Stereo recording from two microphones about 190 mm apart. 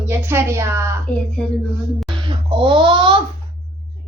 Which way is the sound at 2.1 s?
25° right (ahead or behind).